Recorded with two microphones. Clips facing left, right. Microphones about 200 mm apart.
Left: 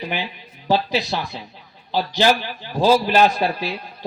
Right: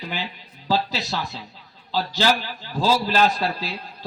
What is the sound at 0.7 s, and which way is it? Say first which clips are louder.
A man's voice: left 4 dB; 15° left (ahead or behind).